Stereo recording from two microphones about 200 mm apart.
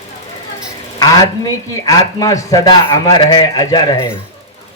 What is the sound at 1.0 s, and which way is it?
Speech, 20° left (ahead or behind).